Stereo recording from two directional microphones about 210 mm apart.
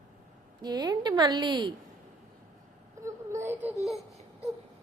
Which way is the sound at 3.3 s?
10° right (ahead or behind).